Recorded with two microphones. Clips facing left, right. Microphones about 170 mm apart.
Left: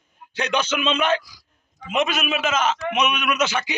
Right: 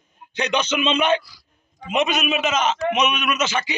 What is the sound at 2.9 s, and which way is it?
Speech, 10° left (ahead or behind).